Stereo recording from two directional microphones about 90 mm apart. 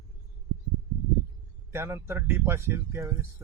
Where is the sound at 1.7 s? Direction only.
25° right (ahead or behind).